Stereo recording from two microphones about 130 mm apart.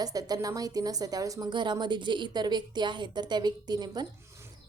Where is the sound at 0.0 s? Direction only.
30° right (ahead or behind).